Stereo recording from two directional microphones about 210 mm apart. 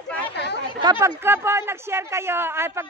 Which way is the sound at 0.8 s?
15° right (ahead or behind).